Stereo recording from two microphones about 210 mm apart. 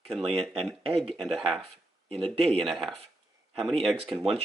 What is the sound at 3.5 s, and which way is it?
Speech, centre (ahead or behind).